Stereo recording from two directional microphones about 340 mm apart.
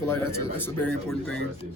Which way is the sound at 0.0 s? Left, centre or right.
Centre.